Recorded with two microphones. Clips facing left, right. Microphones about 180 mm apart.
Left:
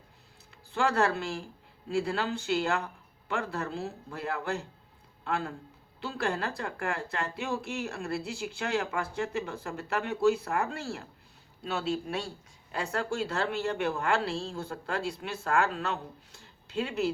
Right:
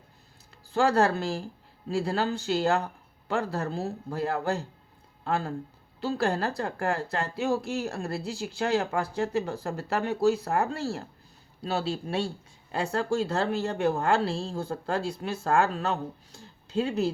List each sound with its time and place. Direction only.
0.7 s speech: 35° right (ahead or behind)